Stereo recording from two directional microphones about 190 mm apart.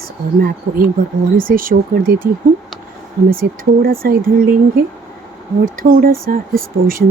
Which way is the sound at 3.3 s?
50° right (ahead or behind).